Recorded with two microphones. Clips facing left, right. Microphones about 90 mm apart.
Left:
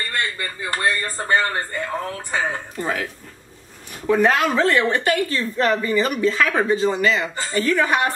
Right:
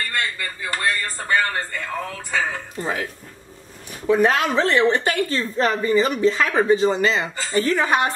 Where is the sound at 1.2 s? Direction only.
25° left (ahead or behind).